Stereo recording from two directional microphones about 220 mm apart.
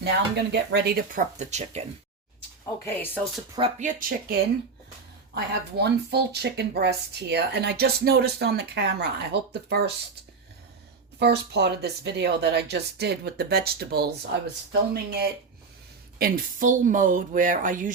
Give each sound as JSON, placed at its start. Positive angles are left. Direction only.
{"t": 0.0, "sound": "speech", "side_deg": -50}
{"t": 1.4, "sound": "speech", "side_deg": -30}
{"t": 2.8, "sound": "speech", "side_deg": 10}
{"t": 3.8, "sound": "speech", "side_deg": -35}
{"t": 5.3, "sound": "speech", "side_deg": -50}
{"t": 11.2, "sound": "speech", "side_deg": -50}